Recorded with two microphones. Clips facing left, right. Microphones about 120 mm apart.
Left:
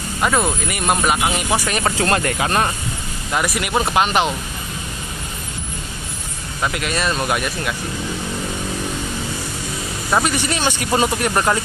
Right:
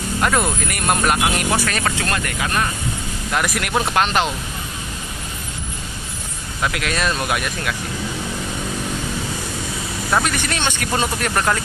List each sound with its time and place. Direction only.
0.2 s speech: 5° left (ahead or behind)
1.6 s speech: 20° left (ahead or behind)
2.0 s speech: 30° left (ahead or behind)
3.3 s speech: centre (ahead or behind)
6.6 s speech: centre (ahead or behind)
10.1 s speech: 5° left (ahead or behind)